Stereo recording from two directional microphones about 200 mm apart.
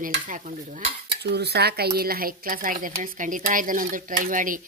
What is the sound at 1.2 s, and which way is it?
A woman's voice, 55° right (ahead or behind).